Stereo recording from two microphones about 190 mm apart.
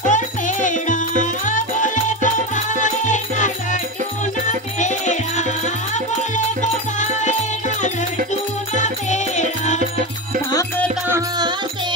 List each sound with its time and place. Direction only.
0.0 s music: 40° left (ahead or behind)
6.3 s music: 40° left (ahead or behind)
8.7 s music: 40° left (ahead or behind)
11.1 s music: 20° right (ahead or behind)